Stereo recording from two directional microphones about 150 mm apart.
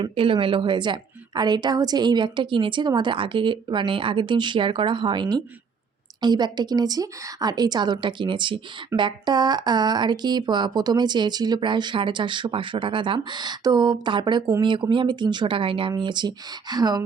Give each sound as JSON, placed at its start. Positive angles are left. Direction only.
{"t": 0.0, "sound": "a woman's voice", "side_deg": -35}